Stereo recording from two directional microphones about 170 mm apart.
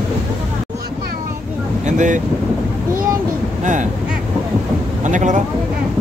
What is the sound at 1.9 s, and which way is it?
Boat, 45° right (ahead or behind).